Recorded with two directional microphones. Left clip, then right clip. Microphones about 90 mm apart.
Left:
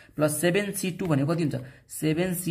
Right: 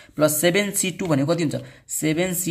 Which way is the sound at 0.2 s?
25° right (ahead or behind).